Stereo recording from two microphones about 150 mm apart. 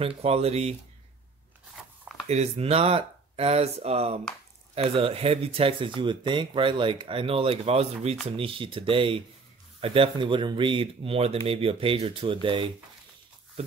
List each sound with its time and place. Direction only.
0.2 s speech: 45° right (ahead or behind)
2.2 s speech: 45° right (ahead or behind)